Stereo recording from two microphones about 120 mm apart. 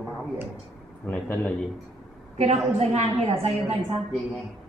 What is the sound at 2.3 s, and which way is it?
Speech, 65° right (ahead or behind).